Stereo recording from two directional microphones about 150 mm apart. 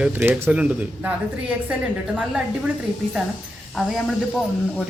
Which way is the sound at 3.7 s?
Centre (ahead or behind).